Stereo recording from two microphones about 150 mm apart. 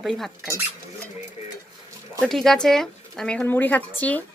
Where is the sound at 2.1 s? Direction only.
Centre (ahead or behind).